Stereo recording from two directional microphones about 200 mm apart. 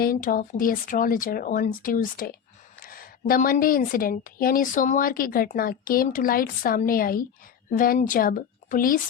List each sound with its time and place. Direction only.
0.0 s a woman's voice: 45° left (ahead or behind)